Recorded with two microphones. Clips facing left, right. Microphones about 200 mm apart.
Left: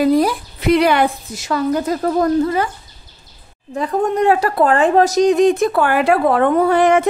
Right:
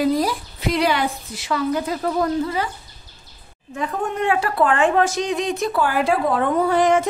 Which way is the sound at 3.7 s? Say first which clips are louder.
Left 7 dB; 35° left (ahead or behind).